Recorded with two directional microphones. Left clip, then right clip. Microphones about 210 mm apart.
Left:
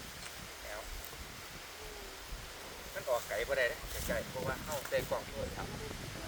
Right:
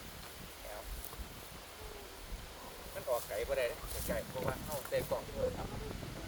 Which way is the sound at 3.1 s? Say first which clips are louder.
Left 2 dB; 25° right (ahead or behind).